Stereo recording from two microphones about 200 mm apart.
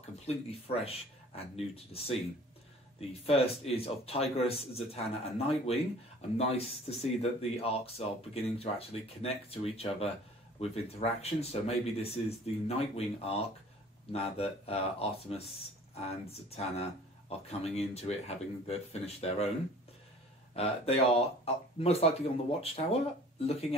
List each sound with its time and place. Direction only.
0.5 s speech: 30° left (ahead or behind)
20.5 s speech: 30° left (ahead or behind)